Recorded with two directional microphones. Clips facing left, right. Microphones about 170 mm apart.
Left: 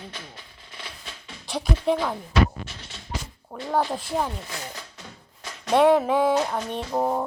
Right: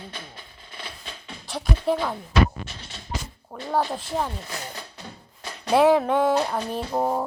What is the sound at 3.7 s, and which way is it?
Speech, centre (ahead or behind).